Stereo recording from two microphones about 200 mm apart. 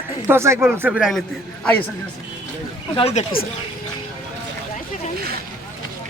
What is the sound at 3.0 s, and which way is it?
Speech, 30° left (ahead or behind).